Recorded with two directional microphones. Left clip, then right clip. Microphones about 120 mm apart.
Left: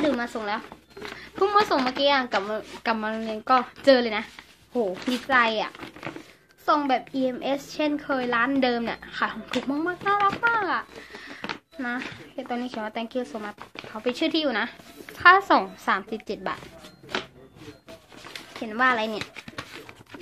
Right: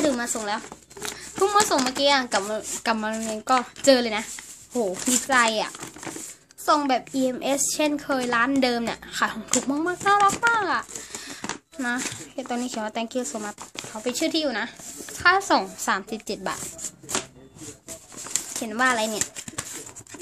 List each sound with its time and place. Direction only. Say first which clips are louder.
0.0 s speech: right 1 dB; 10° right (ahead or behind)
13.9 s a woman's voice: even; centre (ahead or behind)
18.6 s speech: even; 15° right (ahead or behind)